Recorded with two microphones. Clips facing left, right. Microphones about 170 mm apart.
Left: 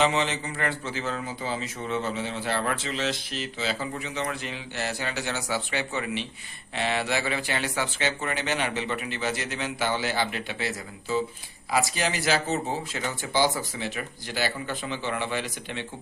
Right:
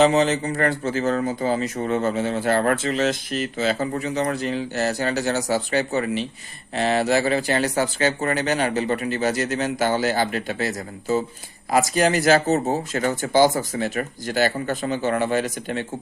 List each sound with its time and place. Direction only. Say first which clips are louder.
0.0 s speech: right 8 dB; 40° right (ahead or behind)